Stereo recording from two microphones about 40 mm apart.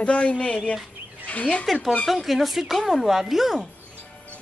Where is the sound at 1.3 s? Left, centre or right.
Left.